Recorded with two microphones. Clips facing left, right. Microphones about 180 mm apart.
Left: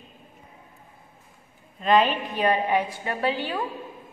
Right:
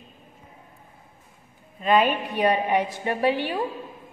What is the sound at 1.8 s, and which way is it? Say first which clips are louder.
A woman's voice: even; 10° right (ahead or behind).